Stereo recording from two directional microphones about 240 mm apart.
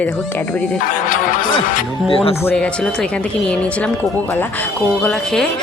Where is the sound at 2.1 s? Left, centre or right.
Left.